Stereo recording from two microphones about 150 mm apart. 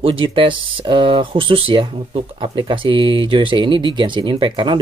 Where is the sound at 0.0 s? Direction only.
35° right (ahead or behind).